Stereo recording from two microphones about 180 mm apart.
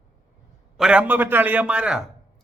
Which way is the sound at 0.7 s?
5° right (ahead or behind).